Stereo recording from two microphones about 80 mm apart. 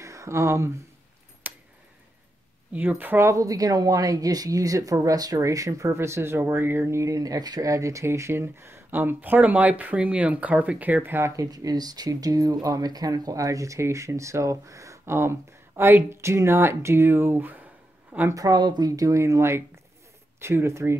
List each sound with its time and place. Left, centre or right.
0.0 s speech: right
2.7 s speech: right
3.3 s speech: right
7.2 s speech: right
11.3 s speech: right
18.3 s speech: right